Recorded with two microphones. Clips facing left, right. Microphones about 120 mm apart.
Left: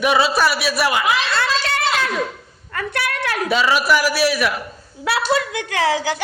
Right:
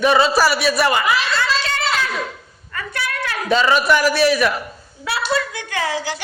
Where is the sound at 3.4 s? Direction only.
5° left (ahead or behind).